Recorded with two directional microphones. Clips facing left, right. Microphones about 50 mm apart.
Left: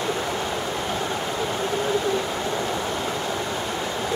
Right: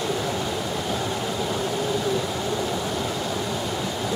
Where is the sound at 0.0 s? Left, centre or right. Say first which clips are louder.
Even; centre.